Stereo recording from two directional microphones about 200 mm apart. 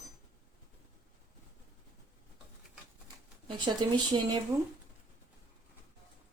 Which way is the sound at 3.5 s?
25° right (ahead or behind).